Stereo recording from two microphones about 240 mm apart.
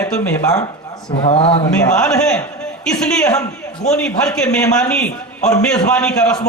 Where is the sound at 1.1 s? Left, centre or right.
Left.